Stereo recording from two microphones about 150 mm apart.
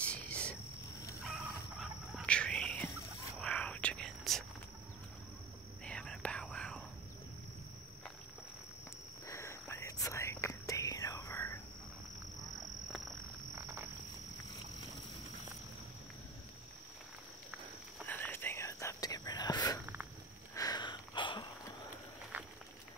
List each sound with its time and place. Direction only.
0.0 s cricket: 10° left (ahead or behind)
1.8 s whispering: 5° left (ahead or behind)
5.9 s whispering: 10° left (ahead or behind)
9.3 s whispering: 20° left (ahead or behind)
13.6 s frog: 15° right (ahead or behind)
18.0 s whispering: 10° left (ahead or behind)
20.5 s a sound: 25° left (ahead or behind)
22.3 s a sound: 10° right (ahead or behind)